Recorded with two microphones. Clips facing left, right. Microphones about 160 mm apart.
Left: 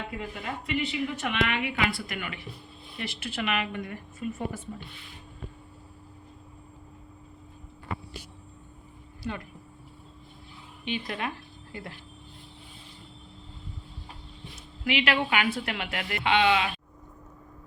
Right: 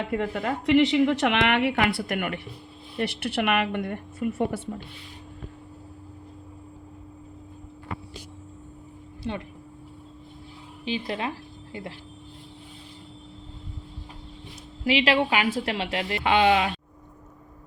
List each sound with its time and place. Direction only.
0.1 s a woman's voice: 60° right (ahead or behind)
9.2 s speech: 25° right (ahead or behind)
10.8 s speech: 30° right (ahead or behind)
14.8 s a woman's voice: 30° right (ahead or behind)
16.2 s a woman's voice: 40° right (ahead or behind)